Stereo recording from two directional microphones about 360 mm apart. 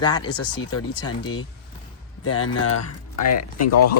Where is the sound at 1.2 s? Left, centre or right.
Left.